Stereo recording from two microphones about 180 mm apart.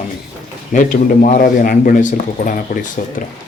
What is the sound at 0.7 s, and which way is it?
Speech, 50° left (ahead or behind).